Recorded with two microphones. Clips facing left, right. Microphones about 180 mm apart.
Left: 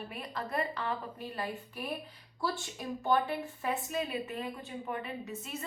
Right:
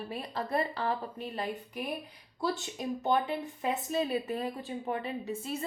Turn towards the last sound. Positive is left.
turn(degrees=-30)  # may be behind; listen again after turning